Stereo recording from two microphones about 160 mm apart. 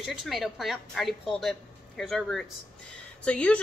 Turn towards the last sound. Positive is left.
turn(degrees=5)  # may be behind; listen again after turning